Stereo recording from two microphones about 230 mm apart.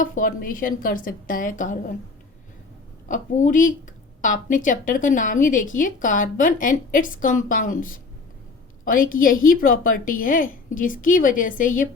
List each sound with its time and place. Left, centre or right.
0.0 s speech: left
3.1 s speech: left